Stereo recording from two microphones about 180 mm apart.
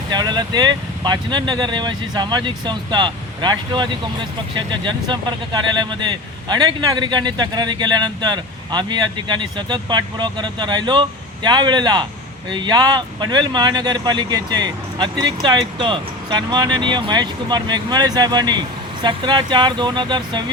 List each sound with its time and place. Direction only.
0.1 s speech: 25° right (ahead or behind)